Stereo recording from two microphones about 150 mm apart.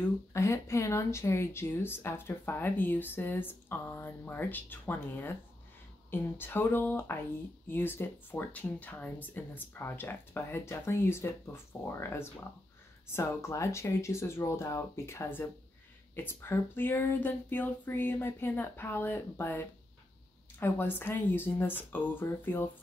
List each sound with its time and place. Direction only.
0.3 s speech: 20° left (ahead or behind)